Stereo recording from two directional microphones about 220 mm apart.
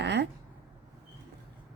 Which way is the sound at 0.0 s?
50° right (ahead or behind).